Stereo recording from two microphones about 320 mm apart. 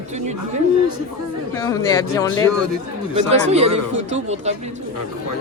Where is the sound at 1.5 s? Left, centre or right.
Centre.